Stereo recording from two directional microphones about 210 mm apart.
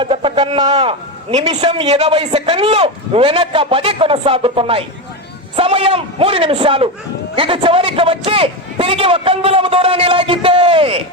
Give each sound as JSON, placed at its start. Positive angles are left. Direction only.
{"t": 0.0, "sound": "a man's voice", "side_deg": -25}
{"t": 1.4, "sound": "a man's voice", "side_deg": -30}